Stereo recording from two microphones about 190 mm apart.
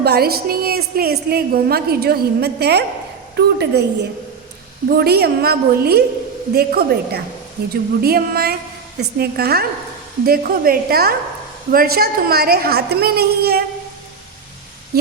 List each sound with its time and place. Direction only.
0.0 s a woman's voice: 55° right (ahead or behind)
4.9 s a woman's voice: 55° right (ahead or behind)